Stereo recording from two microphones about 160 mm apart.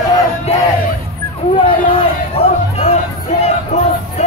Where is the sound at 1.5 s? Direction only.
30° left (ahead or behind).